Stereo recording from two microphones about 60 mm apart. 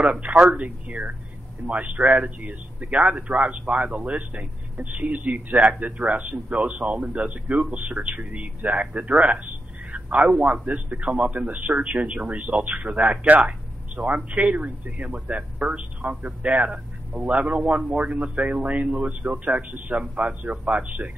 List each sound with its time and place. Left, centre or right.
0.0 s speech: right